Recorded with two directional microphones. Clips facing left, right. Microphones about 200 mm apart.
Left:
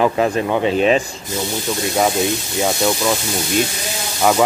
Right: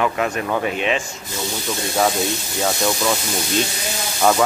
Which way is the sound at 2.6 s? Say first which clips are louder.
Left 2 dB; 10° left (ahead or behind).